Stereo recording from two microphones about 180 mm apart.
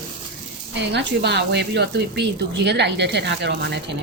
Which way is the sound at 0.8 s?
70° right (ahead or behind).